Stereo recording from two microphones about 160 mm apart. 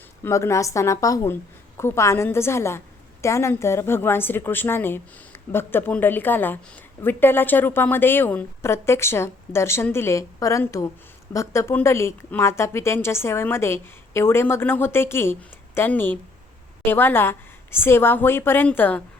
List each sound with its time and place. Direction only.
0.3 s a woman's voice: 20° left (ahead or behind)